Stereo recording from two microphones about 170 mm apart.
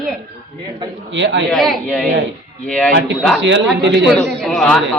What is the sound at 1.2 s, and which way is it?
Speech, 90° right.